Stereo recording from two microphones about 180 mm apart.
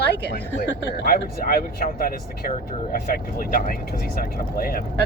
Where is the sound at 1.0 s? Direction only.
55° left (ahead or behind).